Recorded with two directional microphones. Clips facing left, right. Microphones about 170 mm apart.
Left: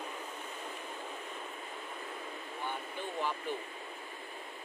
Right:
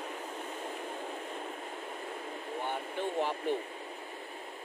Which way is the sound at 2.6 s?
70° right (ahead or behind).